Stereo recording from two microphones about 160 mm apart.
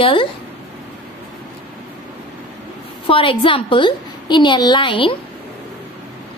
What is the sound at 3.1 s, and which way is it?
A woman's voice, 35° left (ahead or behind).